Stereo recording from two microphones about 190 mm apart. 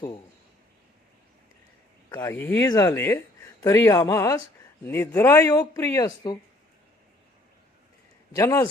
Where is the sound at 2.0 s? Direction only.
20° left (ahead or behind).